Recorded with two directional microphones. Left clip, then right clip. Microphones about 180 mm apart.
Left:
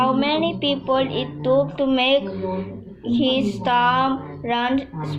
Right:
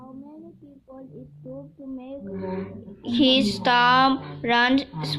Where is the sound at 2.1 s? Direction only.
25° right (ahead or behind).